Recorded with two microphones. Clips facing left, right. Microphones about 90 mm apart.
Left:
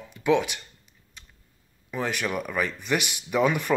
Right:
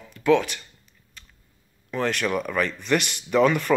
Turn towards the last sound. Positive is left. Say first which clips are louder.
# right 4 dB
turn(degrees=10)  # may be behind; listen again after turning